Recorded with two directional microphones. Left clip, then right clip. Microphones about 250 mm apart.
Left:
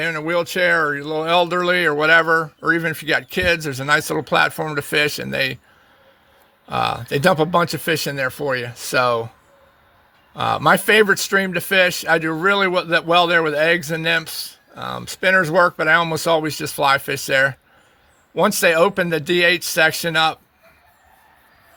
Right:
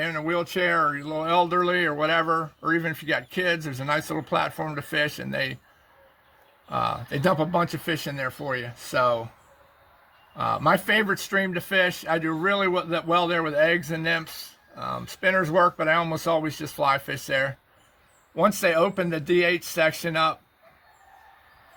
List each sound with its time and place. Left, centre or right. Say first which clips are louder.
0.0 s speech: left 6 dB; left
6.7 s speech: left 6 dB; left
10.3 s speech: left 6 dB; left